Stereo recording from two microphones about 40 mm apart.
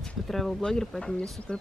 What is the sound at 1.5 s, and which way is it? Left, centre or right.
Speech, left.